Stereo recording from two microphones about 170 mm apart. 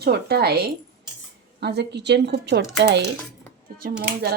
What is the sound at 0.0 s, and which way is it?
Speech, 70° right (ahead or behind).